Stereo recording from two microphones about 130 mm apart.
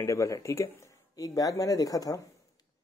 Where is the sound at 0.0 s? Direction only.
25° left (ahead or behind).